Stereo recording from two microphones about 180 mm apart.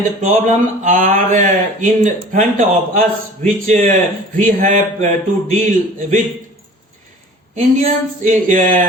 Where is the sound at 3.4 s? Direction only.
40° right (ahead or behind).